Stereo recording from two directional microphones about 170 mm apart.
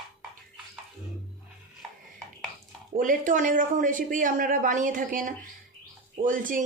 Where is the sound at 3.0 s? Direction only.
50° right (ahead or behind).